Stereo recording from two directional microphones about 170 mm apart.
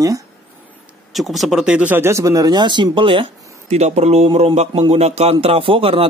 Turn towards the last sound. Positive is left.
turn(degrees=-35)  # may be behind; listen again after turning